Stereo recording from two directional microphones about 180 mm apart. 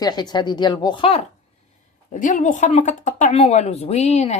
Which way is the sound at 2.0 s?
45° left (ahead or behind).